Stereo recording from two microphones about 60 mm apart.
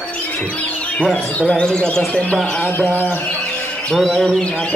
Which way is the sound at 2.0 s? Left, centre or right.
Left.